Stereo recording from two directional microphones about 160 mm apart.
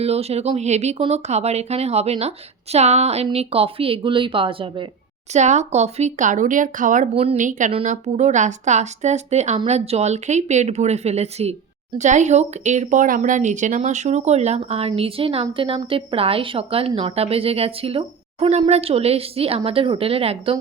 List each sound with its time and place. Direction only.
0.0 s speech: 40° right (ahead or behind)
5.3 s speech: 45° right (ahead or behind)
7.7 s speech: 40° right (ahead or behind)